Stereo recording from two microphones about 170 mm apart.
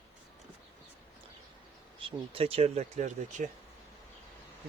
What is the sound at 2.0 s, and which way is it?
Speech, 35° right (ahead or behind).